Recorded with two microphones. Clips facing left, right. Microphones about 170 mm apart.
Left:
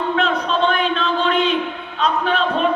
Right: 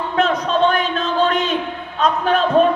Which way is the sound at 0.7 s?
40° right (ahead or behind).